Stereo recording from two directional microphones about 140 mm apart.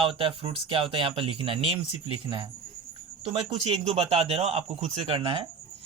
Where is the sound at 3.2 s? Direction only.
40° right (ahead or behind).